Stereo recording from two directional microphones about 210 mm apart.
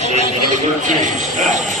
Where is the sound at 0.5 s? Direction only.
35° right (ahead or behind).